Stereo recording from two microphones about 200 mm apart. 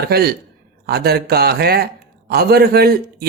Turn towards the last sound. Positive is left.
turn(degrees=-50)  # may be behind; listen again after turning